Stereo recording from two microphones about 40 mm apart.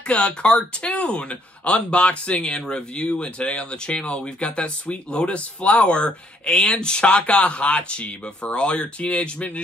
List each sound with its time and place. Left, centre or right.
0.1 s speech: left